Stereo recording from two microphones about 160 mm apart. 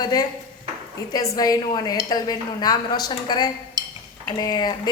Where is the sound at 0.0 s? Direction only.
25° left (ahead or behind).